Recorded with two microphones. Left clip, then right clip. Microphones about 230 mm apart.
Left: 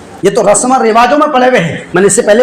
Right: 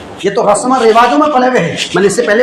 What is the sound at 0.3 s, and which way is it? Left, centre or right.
Speech, left.